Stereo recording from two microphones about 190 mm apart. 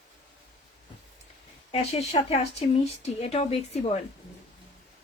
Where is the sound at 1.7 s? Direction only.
35° left (ahead or behind).